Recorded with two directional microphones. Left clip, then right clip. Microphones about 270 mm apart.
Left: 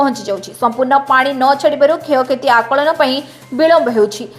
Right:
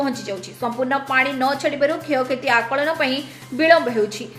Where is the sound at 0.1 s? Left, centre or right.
Centre.